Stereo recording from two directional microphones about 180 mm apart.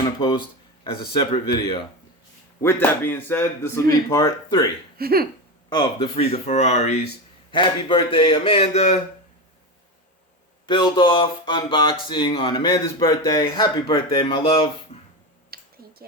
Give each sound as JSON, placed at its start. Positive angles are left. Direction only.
{"t": 0.0, "sound": "speech", "side_deg": 25}
{"t": 2.6, "sound": "speech", "side_deg": 15}
{"t": 4.9, "sound": "a sound", "side_deg": -60}
{"t": 5.6, "sound": "speech", "side_deg": 25}
{"t": 7.5, "sound": "speech", "side_deg": 25}
{"t": 10.7, "sound": "speech", "side_deg": 25}
{"t": 15.4, "sound": "a sound", "side_deg": -60}